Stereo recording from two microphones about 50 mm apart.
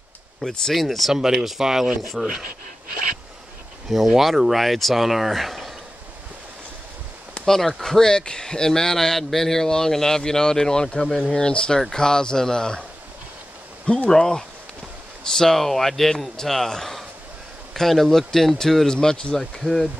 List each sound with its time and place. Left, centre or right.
0.4 s speech: centre
3.9 s speech: centre
7.4 s speech: centre
13.8 s speech: centre